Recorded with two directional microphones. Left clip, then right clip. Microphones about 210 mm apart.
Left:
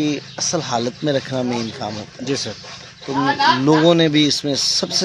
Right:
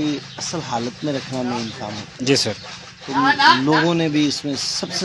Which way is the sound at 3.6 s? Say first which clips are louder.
Left 4 dB; 55° left (ahead or behind).